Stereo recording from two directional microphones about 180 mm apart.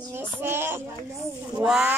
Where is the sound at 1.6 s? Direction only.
5° right (ahead or behind).